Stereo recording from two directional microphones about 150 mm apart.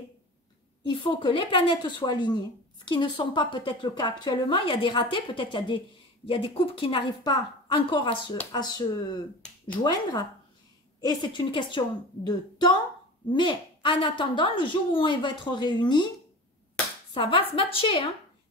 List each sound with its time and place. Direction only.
0.8 s speech: 35° left (ahead or behind)
11.1 s speech: 30° left (ahead or behind)
17.1 s speech: 35° left (ahead or behind)